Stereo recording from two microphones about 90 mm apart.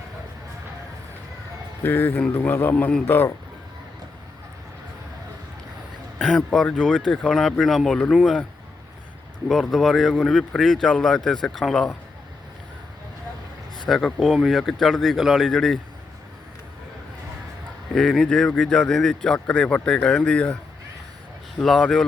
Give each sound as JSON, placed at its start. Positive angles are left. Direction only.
{"t": 1.8, "sound": "a man's voice", "side_deg": 25}
{"t": 6.5, "sound": "speech", "side_deg": 10}
{"t": 9.5, "sound": "speech", "side_deg": 0}
{"t": 13.7, "sound": "speech", "side_deg": 0}
{"t": 17.9, "sound": "speech", "side_deg": 5}
{"t": 21.6, "sound": "speech", "side_deg": 0}